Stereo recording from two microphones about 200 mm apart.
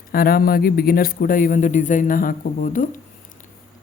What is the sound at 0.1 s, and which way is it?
Speech, 50° left (ahead or behind).